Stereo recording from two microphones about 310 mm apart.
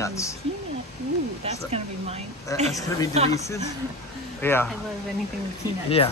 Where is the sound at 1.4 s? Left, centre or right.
Centre.